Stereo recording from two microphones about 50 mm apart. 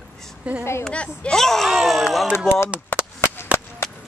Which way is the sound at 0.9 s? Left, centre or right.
Left.